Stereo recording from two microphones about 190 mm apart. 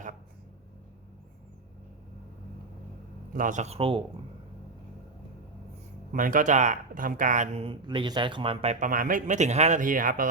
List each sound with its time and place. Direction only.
3.3 s speech: 45° right (ahead or behind)
6.1 s speech: 45° right (ahead or behind)